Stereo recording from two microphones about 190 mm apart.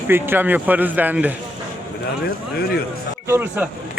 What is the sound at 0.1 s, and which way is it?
A man's voice, 10° right (ahead or behind).